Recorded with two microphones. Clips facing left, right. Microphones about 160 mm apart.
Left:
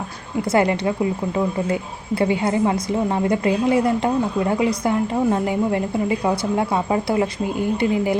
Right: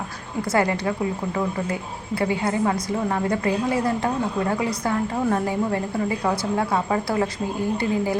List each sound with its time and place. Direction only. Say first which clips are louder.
0.5 s a woman's voice: left 3 dB; 20° left (ahead or behind)
2.1 s a woman's voice: left 4 dB; 25° left (ahead or behind)